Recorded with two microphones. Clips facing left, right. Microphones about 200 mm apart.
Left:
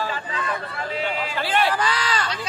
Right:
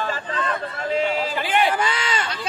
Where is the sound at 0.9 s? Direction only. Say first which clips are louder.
Right 5 dB; 45° right (ahead or behind).